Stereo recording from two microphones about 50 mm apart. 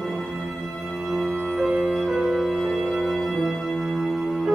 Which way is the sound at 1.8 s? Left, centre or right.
Centre.